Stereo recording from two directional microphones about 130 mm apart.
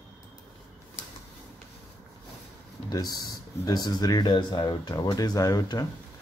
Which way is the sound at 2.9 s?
30° left (ahead or behind).